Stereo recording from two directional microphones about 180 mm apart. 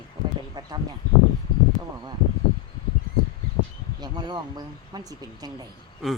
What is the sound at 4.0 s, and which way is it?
Speech, 25° right (ahead or behind).